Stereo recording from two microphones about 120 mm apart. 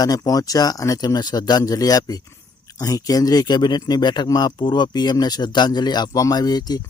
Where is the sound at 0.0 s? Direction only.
30° left (ahead or behind).